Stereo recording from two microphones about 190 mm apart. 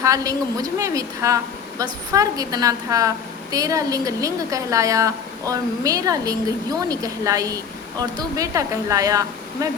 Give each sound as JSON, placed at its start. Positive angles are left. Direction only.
{"t": 0.0, "sound": "a woman's voice", "side_deg": -20}